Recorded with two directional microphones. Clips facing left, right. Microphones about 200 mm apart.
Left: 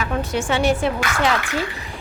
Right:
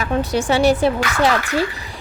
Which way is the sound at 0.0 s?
40° right (ahead or behind).